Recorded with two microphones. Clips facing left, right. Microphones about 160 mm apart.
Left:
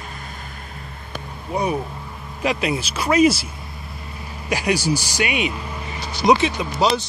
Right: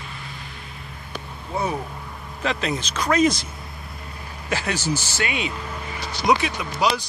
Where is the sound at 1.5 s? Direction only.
15° left (ahead or behind).